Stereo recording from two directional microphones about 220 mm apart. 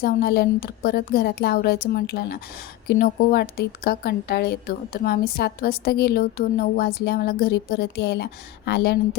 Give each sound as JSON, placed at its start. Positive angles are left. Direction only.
{"t": 0.0, "sound": "speech", "side_deg": 45}